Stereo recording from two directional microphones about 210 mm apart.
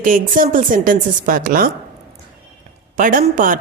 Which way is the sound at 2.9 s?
40° right (ahead or behind).